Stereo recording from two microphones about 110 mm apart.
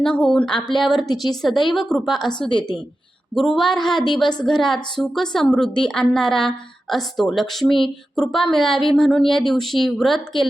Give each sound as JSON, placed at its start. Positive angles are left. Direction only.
{"t": 0.0, "sound": "speech", "side_deg": 10}
{"t": 2.5, "sound": "a woman's voice", "side_deg": 45}
{"t": 3.3, "sound": "speech", "side_deg": 0}